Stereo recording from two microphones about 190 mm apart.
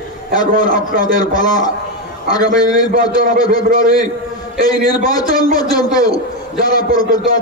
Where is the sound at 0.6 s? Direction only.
20° left (ahead or behind).